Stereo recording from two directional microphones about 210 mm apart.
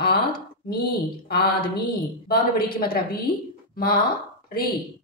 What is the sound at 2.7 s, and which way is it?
Speech, 45° left (ahead or behind).